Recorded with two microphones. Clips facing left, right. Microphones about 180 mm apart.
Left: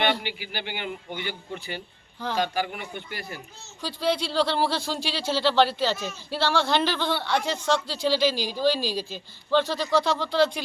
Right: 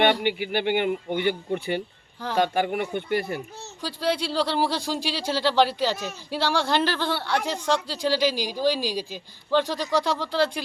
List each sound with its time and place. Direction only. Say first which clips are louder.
0.2 s speech: right 9 dB; 55° right (ahead or behind)
3.8 s speech: even; 10° right (ahead or behind)